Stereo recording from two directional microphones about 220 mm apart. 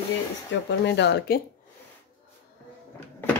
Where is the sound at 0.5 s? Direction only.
55° left (ahead or behind).